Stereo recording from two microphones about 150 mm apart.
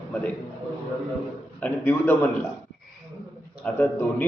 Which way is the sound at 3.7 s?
10° left (ahead or behind).